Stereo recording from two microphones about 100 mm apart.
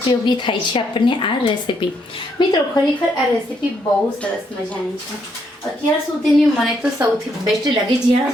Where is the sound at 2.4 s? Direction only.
50° left (ahead or behind).